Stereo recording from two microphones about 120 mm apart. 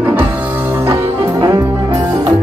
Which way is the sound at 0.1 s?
15° right (ahead or behind).